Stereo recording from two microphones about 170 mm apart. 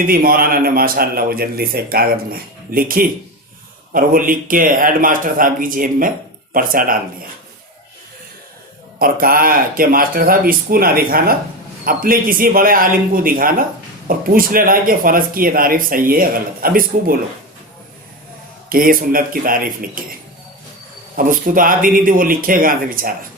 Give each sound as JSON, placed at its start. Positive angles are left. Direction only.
{"t": 0.0, "sound": "speech", "side_deg": -55}
{"t": 9.0, "sound": "speech", "side_deg": -60}
{"t": 18.7, "sound": "speech", "side_deg": -55}
{"t": 21.2, "sound": "speech", "side_deg": -55}